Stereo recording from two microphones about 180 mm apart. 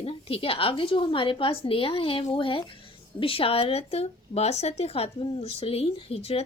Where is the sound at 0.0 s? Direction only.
30° left (ahead or behind).